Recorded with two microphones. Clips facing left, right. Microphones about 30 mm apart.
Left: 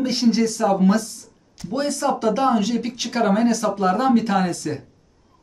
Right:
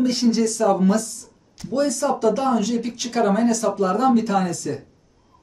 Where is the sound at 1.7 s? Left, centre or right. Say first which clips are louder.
Right 1 dB; left.